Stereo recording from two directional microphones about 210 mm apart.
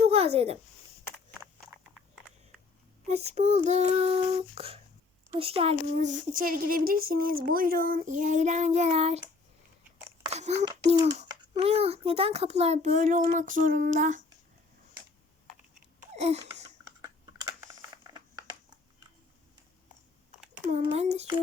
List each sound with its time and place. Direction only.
0.0 s a sound: 30° right (ahead or behind)
3.1 s child singing: 30° right (ahead or behind)
5.3 s speech: 25° right (ahead or behind)
10.3 s a child's voice: 30° right (ahead or behind)
16.0 s babbling: 30° right (ahead or behind)
17.0 s computer keyboard: 15° right (ahead or behind)
20.7 s speech: 30° right (ahead or behind)